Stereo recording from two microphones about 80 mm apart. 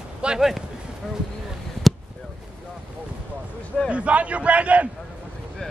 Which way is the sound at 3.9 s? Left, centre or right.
Centre.